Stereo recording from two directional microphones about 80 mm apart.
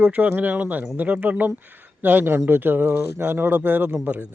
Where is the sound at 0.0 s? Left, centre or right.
Centre.